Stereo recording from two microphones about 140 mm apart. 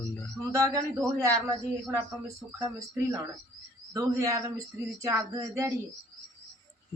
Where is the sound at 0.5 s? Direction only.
20° right (ahead or behind).